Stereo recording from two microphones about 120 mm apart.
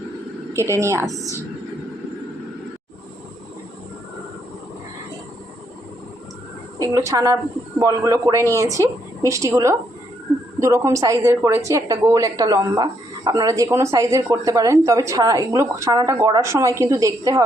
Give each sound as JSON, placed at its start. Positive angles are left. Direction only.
{"t": 0.5, "sound": "a woman's voice", "side_deg": -25}
{"t": 6.7, "sound": "a woman's voice", "side_deg": -25}